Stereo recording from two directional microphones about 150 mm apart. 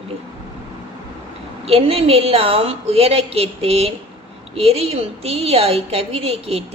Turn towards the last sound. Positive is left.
turn(degrees=-40)  # may be behind; listen again after turning